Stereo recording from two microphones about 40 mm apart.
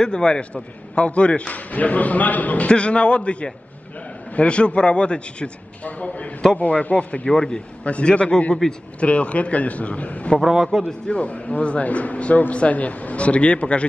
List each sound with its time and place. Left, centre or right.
0.0 s a man's voice: left
2.7 s a man's voice: left
5.9 s speech: left
7.3 s a man's voice: centre
10.4 s a man's voice: centre
11.1 s speech: left